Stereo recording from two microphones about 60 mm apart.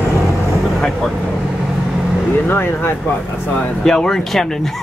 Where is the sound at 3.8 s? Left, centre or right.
Centre.